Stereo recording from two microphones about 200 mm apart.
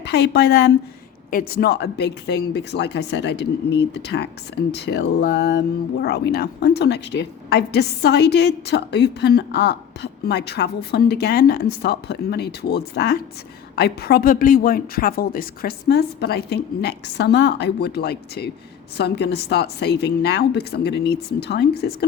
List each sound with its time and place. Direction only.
0.0 s a woman's voice: 55° left (ahead or behind)